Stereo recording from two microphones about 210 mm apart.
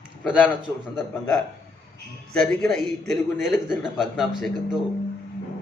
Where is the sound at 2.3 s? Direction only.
5° left (ahead or behind).